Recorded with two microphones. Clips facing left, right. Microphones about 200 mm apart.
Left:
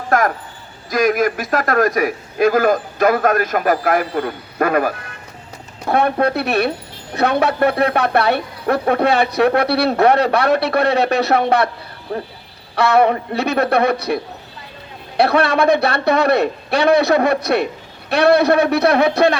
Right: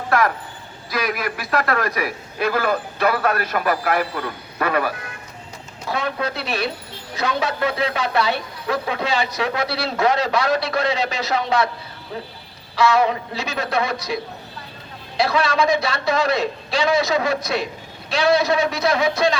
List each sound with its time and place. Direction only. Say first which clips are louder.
0.1 s a sound: left 3 dB; 45° left (ahead or behind)
0.9 s a man's voice: left 9 dB; 45° left (ahead or behind)
5.8 s speech: left 8 dB; 55° left (ahead or behind)
15.2 s speech: left 5 dB; 60° left (ahead or behind)